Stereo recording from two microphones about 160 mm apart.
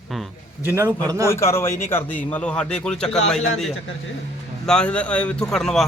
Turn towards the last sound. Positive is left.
turn(degrees=5)  # may be behind; listen again after turning